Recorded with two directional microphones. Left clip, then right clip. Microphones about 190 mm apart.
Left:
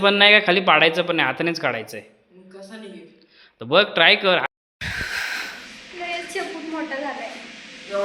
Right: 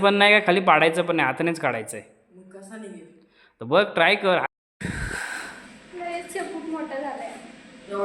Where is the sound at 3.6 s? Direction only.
10° right (ahead or behind); by 5.5 s 25° right (ahead or behind).